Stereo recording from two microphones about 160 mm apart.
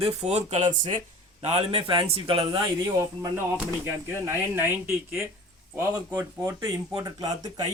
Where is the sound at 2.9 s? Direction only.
20° right (ahead or behind).